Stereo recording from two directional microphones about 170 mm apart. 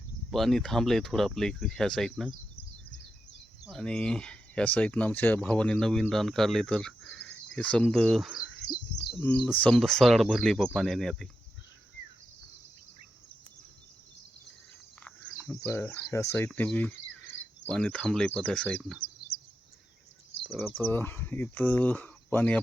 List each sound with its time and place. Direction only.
0.3 s speech: centre (ahead or behind)
3.7 s speech: 5° left (ahead or behind)
16.0 s speech: 15° left (ahead or behind)
20.6 s speech: 15° left (ahead or behind)